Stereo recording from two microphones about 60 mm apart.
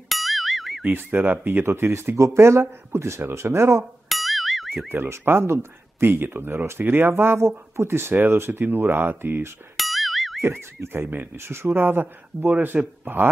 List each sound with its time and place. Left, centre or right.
0.1 s music: centre
0.9 s speech: right
4.1 s boing: centre
4.8 s speech: right
9.8 s boing: centre
10.4 s speech: right